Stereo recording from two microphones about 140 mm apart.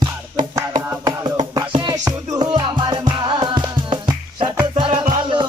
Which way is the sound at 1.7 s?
35° right (ahead or behind).